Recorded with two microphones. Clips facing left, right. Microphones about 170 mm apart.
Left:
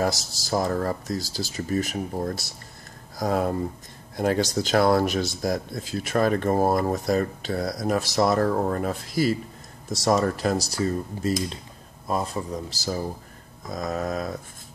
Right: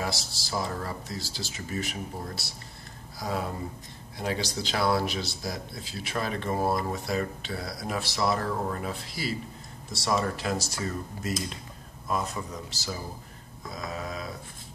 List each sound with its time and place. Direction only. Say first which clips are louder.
0.0 s speech: left 8 dB; 45° left (ahead or behind)